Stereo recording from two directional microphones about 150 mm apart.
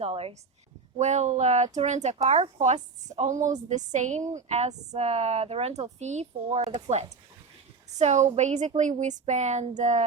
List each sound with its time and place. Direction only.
0.0 s a woman's voice: 40° right (ahead or behind)